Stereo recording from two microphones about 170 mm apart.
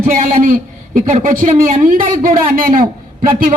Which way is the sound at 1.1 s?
50° right (ahead or behind).